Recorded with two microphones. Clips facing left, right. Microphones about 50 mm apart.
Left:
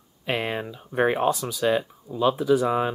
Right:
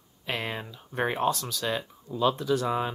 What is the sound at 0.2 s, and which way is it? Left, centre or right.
Speech, centre.